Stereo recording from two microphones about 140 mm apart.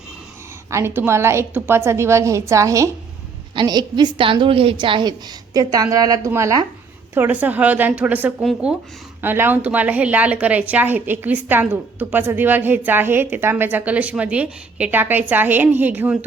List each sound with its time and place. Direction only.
0.7 s a woman's voice: 20° right (ahead or behind)
3.5 s a woman's voice: 30° right (ahead or behind); by 8.3 s 10° right (ahead or behind)
8.4 s speech: centre (ahead or behind)
9.2 s a woman's voice: 15° right (ahead or behind)